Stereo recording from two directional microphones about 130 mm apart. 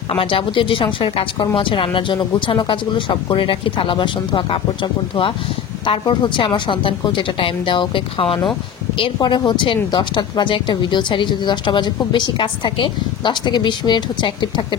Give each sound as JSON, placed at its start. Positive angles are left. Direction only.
{"t": 0.1, "sound": "a woman's voice", "side_deg": 45}